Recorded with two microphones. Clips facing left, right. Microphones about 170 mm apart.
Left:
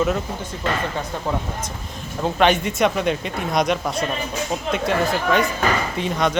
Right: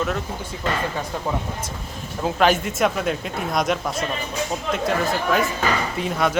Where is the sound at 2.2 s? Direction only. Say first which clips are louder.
Left 1 dB; centre (ahead or behind).